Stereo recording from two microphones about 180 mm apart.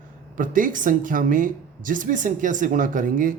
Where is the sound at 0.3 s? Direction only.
50° right (ahead or behind).